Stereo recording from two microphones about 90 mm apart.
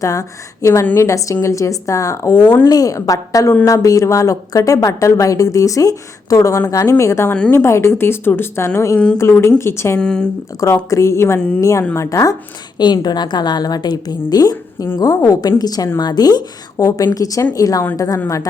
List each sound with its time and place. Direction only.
0.0 s a woman's voice: 35° left (ahead or behind)
7.3 s a woman's voice: 10° left (ahead or behind)
7.5 s speech: 30° left (ahead or behind)
10.0 s a woman's voice: 10° left (ahead or behind)
10.8 s a woman's voice: 35° left (ahead or behind)
11.3 s a woman's voice: 15° left (ahead or behind)
11.6 s a woman's voice: 35° left (ahead or behind)
12.8 s a woman's voice: 50° left (ahead or behind)
16.7 s a woman's voice: 40° left (ahead or behind)